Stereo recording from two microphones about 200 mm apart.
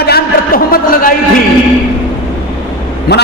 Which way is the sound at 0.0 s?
50° left (ahead or behind).